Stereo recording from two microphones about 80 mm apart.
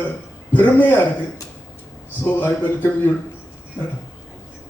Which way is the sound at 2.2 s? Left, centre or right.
Left.